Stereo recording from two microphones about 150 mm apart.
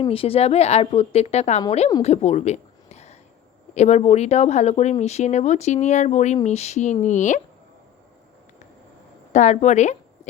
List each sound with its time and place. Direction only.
0.0 s speech: 40° left (ahead or behind)
2.0 s a sound: 45° left (ahead or behind)
3.8 s speech: 50° left (ahead or behind)
9.3 s speech: 50° left (ahead or behind)